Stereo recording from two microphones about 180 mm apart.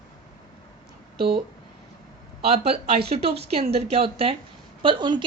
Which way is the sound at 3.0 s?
35° right (ahead or behind).